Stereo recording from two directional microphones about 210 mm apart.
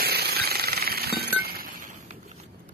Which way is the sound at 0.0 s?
45° right (ahead or behind).